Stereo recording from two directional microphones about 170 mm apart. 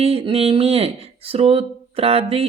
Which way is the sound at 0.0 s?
35° right (ahead or behind).